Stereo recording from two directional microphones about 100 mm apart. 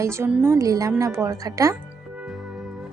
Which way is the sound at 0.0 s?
25° right (ahead or behind).